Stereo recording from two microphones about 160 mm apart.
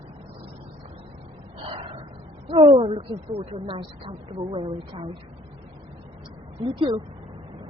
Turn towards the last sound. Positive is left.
turn(degrees=-30)  # may be behind; listen again after turning